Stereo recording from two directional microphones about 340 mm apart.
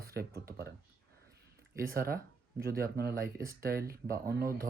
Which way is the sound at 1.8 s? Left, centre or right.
Right.